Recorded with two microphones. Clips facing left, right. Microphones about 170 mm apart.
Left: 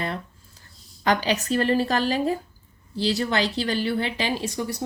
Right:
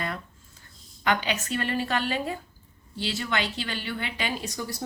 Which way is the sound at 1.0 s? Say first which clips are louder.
Left 4 dB; 35° left (ahead or behind).